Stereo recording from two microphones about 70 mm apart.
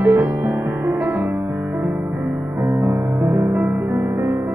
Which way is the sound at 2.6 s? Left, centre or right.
Right.